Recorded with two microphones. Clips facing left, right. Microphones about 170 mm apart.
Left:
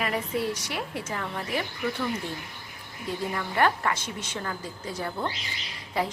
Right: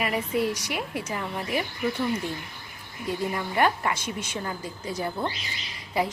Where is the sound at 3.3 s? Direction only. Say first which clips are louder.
Even; 15° right (ahead or behind).